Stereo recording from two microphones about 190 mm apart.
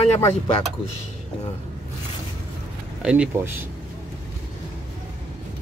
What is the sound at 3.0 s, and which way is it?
Speech, 5° right (ahead or behind).